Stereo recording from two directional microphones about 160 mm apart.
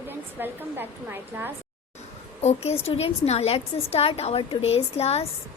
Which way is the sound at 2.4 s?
40° left (ahead or behind).